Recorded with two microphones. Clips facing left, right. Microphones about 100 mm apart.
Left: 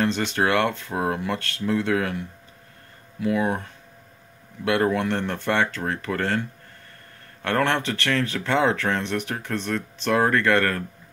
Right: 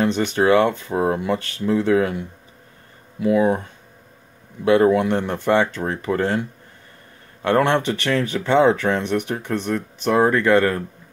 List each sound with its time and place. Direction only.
0.0 s speech: 15° right (ahead or behind)
0.9 s speech: 25° right (ahead or behind)
1.2 s speech: 10° right (ahead or behind)
2.0 s speech: 20° right (ahead or behind)
4.9 s speech: 10° right (ahead or behind)
7.4 s speech: 20° right (ahead or behind)